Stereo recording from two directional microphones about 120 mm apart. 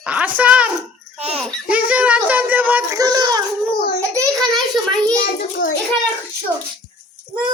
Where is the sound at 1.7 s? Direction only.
10° right (ahead or behind).